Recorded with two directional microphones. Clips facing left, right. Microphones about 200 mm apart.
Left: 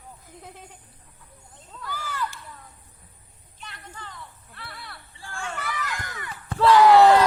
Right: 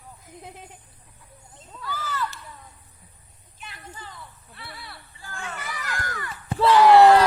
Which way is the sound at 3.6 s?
5° right (ahead or behind).